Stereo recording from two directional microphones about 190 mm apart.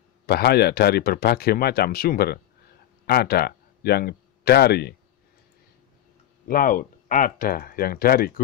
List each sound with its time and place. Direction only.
0.3 s speech: 60° left (ahead or behind)
6.4 s speech: 50° left (ahead or behind)